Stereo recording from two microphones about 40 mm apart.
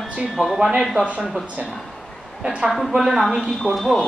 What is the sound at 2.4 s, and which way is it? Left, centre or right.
Speech, right.